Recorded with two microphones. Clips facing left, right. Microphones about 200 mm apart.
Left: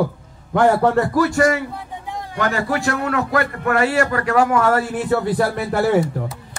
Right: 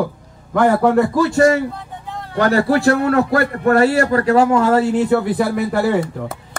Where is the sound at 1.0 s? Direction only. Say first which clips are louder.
Right 3 dB; 25° right (ahead or behind).